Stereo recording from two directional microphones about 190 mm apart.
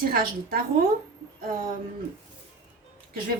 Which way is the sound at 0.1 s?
50° right (ahead or behind).